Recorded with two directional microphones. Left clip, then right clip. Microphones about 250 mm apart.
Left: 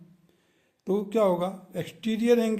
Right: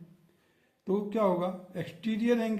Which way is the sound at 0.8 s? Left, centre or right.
Left.